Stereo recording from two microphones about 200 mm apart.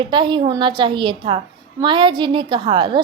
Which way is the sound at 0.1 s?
25° right (ahead or behind).